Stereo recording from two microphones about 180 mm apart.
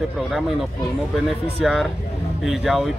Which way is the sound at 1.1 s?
Centre (ahead or behind).